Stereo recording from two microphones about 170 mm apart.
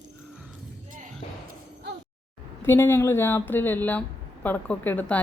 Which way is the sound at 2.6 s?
15° left (ahead or behind).